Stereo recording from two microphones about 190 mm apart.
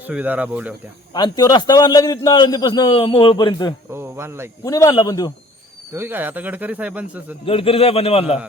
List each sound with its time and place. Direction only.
0.1 s speech: 5° right (ahead or behind)
1.1 s a man's voice: 20° left (ahead or behind)
3.9 s a sound: 15° right (ahead or behind)
4.6 s a man's voice: 20° left (ahead or behind)
5.9 s speech: 10° right (ahead or behind)
7.4 s a man's voice: 30° left (ahead or behind)